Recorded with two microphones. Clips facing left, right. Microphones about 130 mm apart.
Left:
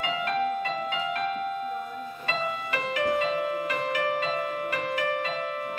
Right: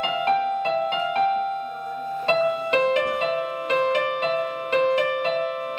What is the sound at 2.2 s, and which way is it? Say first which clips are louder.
Music: right 10 dB; 25° right (ahead or behind).